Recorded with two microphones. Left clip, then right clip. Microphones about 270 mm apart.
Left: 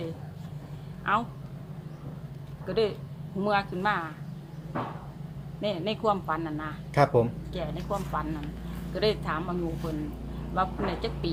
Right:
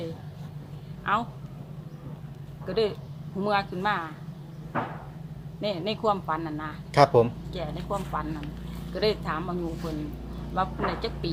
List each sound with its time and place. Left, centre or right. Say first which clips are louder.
1.1 s speech: even; centre
2.6 s speech: right 1 dB; centre
5.5 s speech: right 1 dB; centre
6.9 s speech: right 4 dB; right
7.5 s speech: right 1 dB; centre